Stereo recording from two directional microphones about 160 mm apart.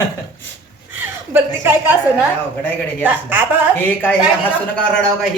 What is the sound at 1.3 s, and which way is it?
A woman's voice, 15° right (ahead or behind).